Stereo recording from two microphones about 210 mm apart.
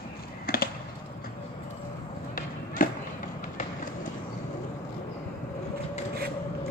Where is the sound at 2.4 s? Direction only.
40° left (ahead or behind).